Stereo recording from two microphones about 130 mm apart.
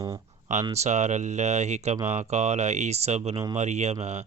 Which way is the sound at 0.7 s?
60° right (ahead or behind).